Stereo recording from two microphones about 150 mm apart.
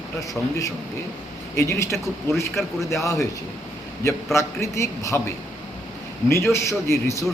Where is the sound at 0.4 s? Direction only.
10° left (ahead or behind).